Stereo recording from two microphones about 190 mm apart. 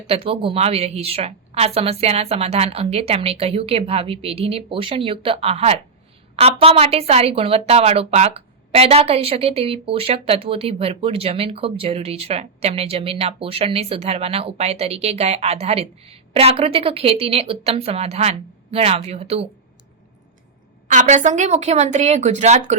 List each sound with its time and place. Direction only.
0.1 s a woman's voice: 30° right (ahead or behind)
20.8 s a woman's voice: 40° right (ahead or behind)